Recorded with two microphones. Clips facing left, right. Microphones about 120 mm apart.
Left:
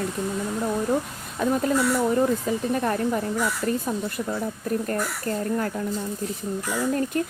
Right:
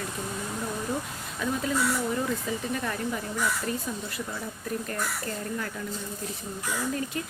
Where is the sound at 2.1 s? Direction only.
40° left (ahead or behind).